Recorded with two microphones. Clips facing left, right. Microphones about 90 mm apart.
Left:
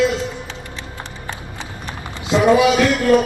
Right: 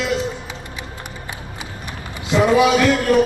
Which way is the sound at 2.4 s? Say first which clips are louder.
Left 2 dB; 20° left (ahead or behind).